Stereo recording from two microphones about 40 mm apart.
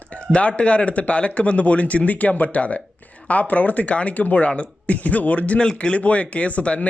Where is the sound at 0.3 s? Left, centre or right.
Left.